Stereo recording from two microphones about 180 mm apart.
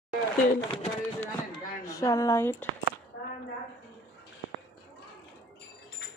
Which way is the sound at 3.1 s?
55° left (ahead or behind).